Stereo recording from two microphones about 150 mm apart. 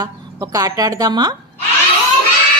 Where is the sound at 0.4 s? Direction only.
25° right (ahead or behind).